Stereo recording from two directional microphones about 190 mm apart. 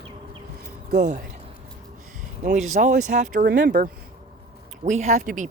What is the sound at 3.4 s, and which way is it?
Speech, 55° right (ahead or behind).